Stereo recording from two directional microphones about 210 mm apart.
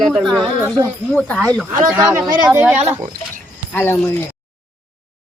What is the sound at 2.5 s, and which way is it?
Speech, 10° right (ahead or behind).